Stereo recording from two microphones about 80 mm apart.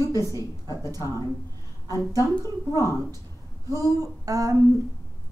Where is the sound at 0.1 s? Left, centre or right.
Right.